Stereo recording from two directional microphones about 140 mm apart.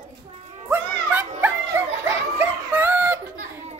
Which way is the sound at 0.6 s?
15° right (ahead or behind).